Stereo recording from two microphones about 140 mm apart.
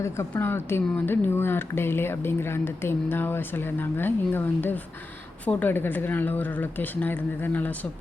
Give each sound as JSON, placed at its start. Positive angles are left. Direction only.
{"t": 0.0, "sound": "speech", "side_deg": 15}